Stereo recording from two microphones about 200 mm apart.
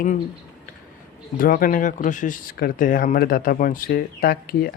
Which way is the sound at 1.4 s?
45° left (ahead or behind).